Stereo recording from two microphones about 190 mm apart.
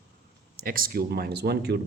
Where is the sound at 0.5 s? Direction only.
50° right (ahead or behind).